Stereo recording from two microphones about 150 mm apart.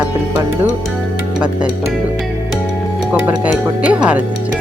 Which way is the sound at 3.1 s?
10° right (ahead or behind).